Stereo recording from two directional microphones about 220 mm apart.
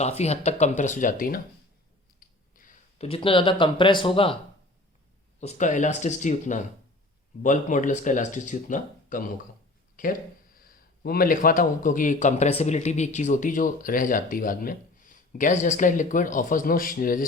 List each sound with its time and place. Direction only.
0.0 s speech: 30° left (ahead or behind)
2.1 s a sound: 40° left (ahead or behind)
5.4 s speech: 30° left (ahead or behind)